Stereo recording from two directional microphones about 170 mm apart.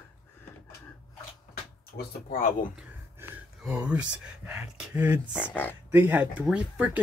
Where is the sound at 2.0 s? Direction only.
55° left (ahead or behind).